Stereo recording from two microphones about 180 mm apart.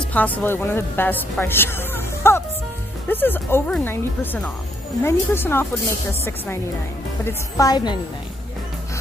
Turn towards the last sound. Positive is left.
turn(degrees=20)  # may be behind; listen again after turning